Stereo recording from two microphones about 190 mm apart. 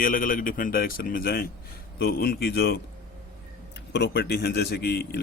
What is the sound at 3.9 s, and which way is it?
A man's voice, 65° left (ahead or behind).